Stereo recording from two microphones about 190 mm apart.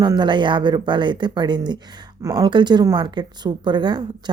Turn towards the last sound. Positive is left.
turn(degrees=-25)  # may be behind; listen again after turning